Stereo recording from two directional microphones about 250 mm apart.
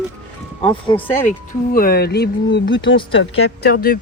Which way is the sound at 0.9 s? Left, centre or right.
Left.